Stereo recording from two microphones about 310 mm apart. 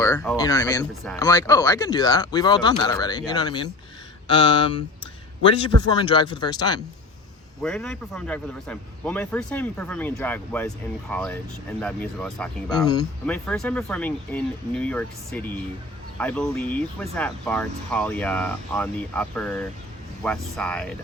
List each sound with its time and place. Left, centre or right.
0.0 s speech: centre
6.0 s speech: centre
7.6 s speech: centre